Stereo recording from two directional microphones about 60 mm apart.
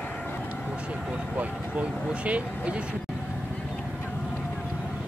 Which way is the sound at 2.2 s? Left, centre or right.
Right.